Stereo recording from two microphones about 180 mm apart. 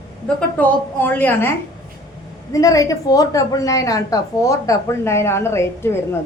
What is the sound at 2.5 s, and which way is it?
A woman's voice, 20° left (ahead or behind).